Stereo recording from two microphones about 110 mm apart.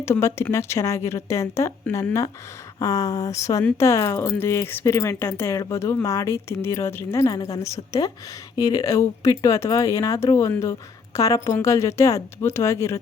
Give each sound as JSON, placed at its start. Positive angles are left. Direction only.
{"t": 0.0, "sound": "speech", "side_deg": 25}